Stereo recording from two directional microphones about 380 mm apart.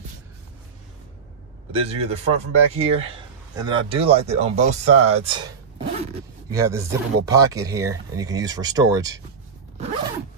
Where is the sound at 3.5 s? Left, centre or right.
Centre.